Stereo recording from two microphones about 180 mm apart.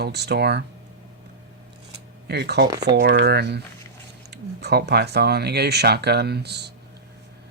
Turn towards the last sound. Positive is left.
turn(degrees=-65)  # may be behind; listen again after turning